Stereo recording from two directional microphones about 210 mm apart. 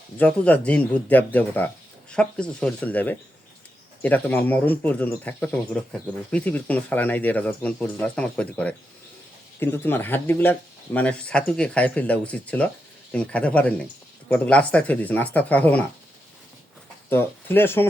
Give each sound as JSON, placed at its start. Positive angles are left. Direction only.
{"t": 0.2, "sound": "speech", "side_deg": 5}
{"t": 17.1, "sound": "speech", "side_deg": 10}